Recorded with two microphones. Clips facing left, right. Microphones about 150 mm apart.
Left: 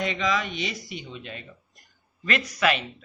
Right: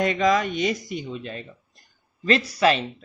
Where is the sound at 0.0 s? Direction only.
45° right (ahead or behind).